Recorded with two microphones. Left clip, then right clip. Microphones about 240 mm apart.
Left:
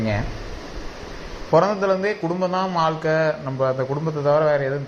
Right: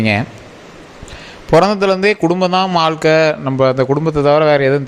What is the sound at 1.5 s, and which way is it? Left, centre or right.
A man's voice, right.